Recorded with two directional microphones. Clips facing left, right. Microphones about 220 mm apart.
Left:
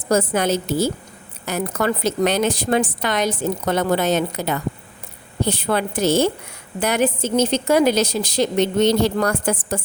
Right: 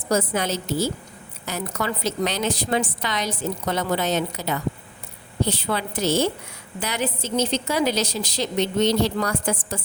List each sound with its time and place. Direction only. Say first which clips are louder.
0.1 s a woman's voice: left 4 dB; 50° left (ahead or behind)